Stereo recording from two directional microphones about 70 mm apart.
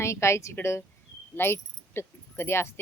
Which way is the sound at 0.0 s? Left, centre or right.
Left.